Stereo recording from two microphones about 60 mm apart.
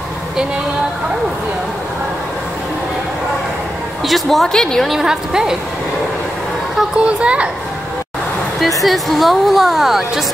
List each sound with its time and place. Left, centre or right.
4.0 s a woman's voice: centre
4.8 s a woman's voice: centre
7.0 s a child's voice: centre
8.5 s speech: centre